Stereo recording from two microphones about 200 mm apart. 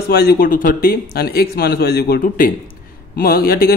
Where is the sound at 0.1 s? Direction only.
50° left (ahead or behind).